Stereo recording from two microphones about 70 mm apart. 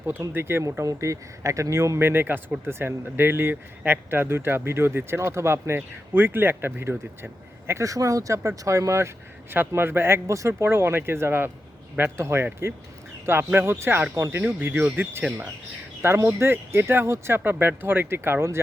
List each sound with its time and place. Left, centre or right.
0.0 s speech: right
0.6 s speech: right
7.7 s speech: right
10.6 s speech: right
14.6 s speech: right